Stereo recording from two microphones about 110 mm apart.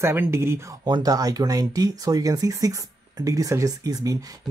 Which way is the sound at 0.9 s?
35° right (ahead or behind).